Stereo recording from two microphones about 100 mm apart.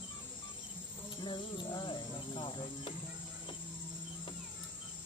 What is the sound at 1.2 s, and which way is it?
Music, 50° left (ahead or behind).